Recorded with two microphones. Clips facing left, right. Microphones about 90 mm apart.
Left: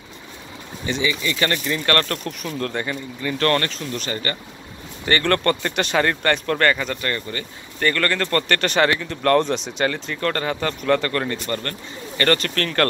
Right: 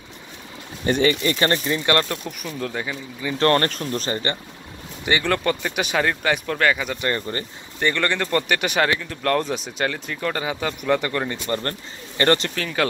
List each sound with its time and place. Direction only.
0.8 s speech: 50° right (ahead or behind)
1.3 s speech: 30° right (ahead or behind)
1.9 s speech: 15° right (ahead or behind)
3.3 s speech: 30° right (ahead or behind)
4.1 s speech: 25° right (ahead or behind)
5.0 s speech: 10° right (ahead or behind)
7.0 s speech: 25° right (ahead or behind)
7.8 s speech: 15° right (ahead or behind)
12.5 s speech: 5° right (ahead or behind)